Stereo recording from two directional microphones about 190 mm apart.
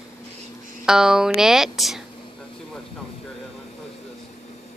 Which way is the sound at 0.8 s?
5° right (ahead or behind).